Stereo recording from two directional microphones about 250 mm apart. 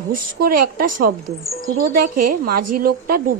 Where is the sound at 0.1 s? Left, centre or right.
Right.